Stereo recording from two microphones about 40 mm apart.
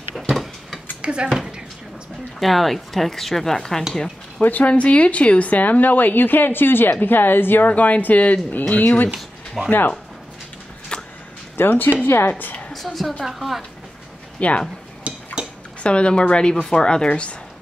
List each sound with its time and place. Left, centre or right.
0.1 s a sound: centre
1.0 s speech: right
2.4 s speech: centre
4.4 s a woman's voice: left
4.6 s a woman's voice: left
7.6 s a woman's voice: left
10.9 s a sound: left
11.5 s speech: left
12.3 s a woman's voice: left
12.7 s a woman's voice: centre
14.4 s speech: left
15.1 s a sound: right
15.8 s a woman's voice: left